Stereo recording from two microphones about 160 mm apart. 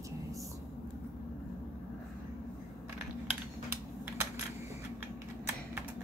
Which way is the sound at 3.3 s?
15° right (ahead or behind).